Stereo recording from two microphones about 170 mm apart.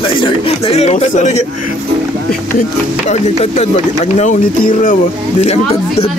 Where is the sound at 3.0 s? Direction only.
40° left (ahead or behind).